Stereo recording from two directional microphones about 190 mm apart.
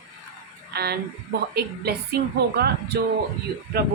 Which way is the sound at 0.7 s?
55° right (ahead or behind).